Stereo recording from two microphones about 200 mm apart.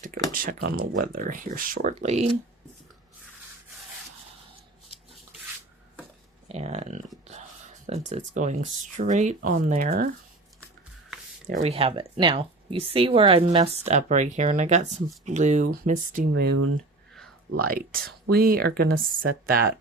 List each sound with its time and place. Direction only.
0.3 s speech: 45° right (ahead or behind)
6.5 s speech: 35° right (ahead or behind)
7.3 s a sound: 35° right (ahead or behind)
8.4 s speech: 40° right (ahead or behind)
11.4 s speech: 35° right (ahead or behind)
16.3 s speech: 75° right (ahead or behind)
17.7 s speech: 45° right (ahead or behind)